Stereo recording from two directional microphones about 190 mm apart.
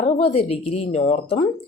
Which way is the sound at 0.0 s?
30° left (ahead or behind).